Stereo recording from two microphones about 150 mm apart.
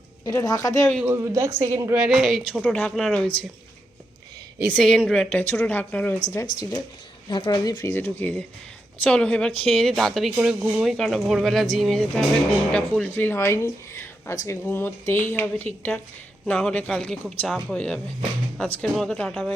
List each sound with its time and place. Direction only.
0.3 s a woman's voice: 25° left (ahead or behind)
1.0 s a woman's voice: 20° right (ahead or behind)
2.0 s speech: centre (ahead or behind)
4.7 s speech: 5° left (ahead or behind)
6.3 s a woman's voice: 25° left (ahead or behind); by 13.1 s centre (ahead or behind)
13.1 s speech: 15° left (ahead or behind)